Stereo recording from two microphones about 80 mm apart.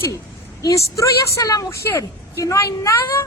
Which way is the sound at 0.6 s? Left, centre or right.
Left.